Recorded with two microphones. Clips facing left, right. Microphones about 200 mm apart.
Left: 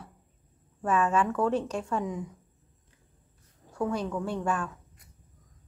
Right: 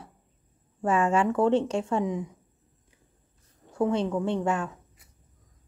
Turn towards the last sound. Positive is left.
turn(degrees=-20)  # may be behind; listen again after turning